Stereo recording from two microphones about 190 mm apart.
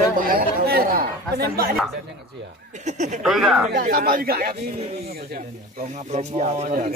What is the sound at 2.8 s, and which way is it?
Speech, 40° right (ahead or behind).